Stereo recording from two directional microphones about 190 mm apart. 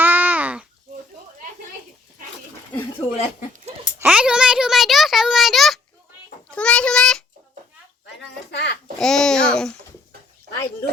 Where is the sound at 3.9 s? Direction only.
5° right (ahead or behind).